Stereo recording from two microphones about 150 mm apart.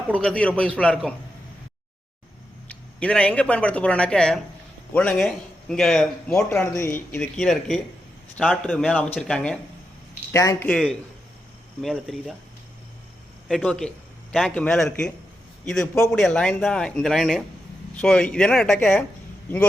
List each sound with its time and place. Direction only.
0.1 s a man's voice: 5° left (ahead or behind)
2.6 s a man's voice: 5° left (ahead or behind)
6.7 s a man's voice: 15° left (ahead or behind)
7.3 s a man's voice: centre (ahead or behind)
10.3 s speech: 20° left (ahead or behind)
10.7 s a man's voice: centre (ahead or behind)
13.5 s a man's voice: 5° left (ahead or behind)